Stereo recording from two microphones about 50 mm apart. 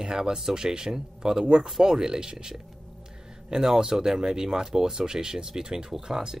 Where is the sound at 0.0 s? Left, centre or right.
Centre.